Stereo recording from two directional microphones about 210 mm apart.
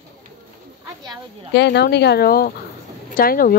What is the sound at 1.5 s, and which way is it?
Speech, 55° left (ahead or behind).